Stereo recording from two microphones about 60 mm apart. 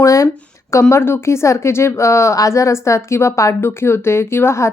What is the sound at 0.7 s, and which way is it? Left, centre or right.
A woman's voice, left.